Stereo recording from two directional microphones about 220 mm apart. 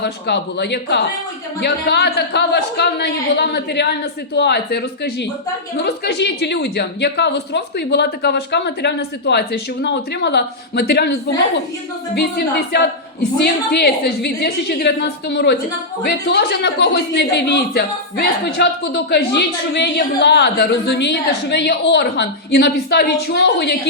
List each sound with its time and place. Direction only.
0.0 s speech: 50° left (ahead or behind)